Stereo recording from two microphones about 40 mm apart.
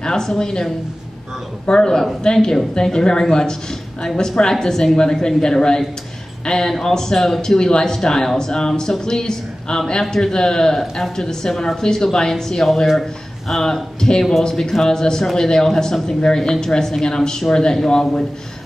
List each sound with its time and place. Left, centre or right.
0.0 s speech: centre
1.7 s a man's voice: centre